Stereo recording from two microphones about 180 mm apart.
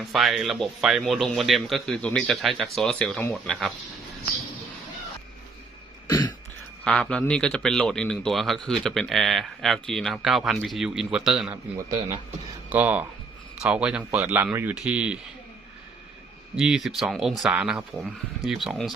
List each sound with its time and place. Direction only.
0.0 s a man's voice: centre (ahead or behind)
6.1 s cough: 20° left (ahead or behind)
6.8 s a man's voice: 5° left (ahead or behind)
12.7 s speech: 10° right (ahead or behind)
16.6 s a man's voice: 5° right (ahead or behind)